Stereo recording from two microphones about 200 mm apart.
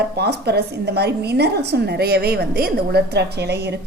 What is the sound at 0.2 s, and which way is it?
A woman's voice, 55° right (ahead or behind).